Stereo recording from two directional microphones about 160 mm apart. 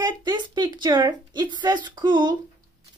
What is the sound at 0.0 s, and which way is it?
A woman's voice, 25° right (ahead or behind).